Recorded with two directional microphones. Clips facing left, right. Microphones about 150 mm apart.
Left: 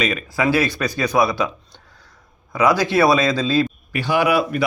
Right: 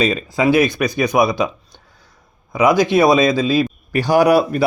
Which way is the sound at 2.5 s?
15° right (ahead or behind).